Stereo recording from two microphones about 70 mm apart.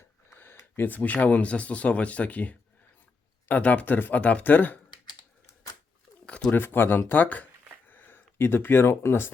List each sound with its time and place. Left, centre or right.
0.3 s speech: left
6.5 s speech: left